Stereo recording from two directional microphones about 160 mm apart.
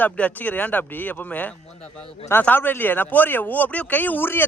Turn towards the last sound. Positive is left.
turn(degrees=15)  # may be behind; listen again after turning